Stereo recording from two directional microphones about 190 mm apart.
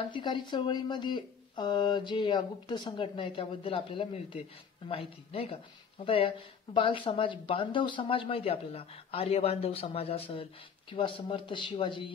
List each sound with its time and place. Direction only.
0.1 s speech: 25° left (ahead or behind)